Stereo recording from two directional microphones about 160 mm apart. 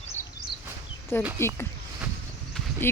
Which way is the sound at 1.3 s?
15° left (ahead or behind).